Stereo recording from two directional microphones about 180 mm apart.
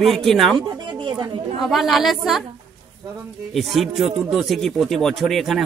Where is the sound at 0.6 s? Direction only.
25° right (ahead or behind).